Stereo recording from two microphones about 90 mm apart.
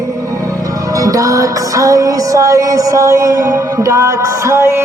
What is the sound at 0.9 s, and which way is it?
Music, 40° right (ahead or behind).